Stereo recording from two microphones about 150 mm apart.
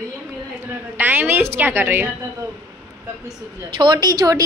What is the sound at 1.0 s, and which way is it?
A woman's voice, 10° right (ahead or behind).